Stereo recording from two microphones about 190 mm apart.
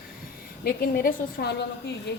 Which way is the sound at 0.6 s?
50° left (ahead or behind).